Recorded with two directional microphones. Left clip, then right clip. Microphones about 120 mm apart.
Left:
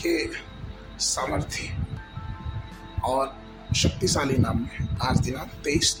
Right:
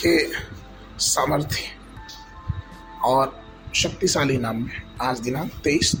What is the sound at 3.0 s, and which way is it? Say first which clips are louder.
Speech: right 6 dB; 30° right (ahead or behind).